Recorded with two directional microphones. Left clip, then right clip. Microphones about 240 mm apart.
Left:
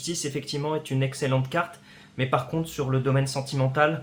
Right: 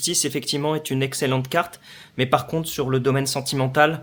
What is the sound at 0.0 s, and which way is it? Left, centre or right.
Speech, right.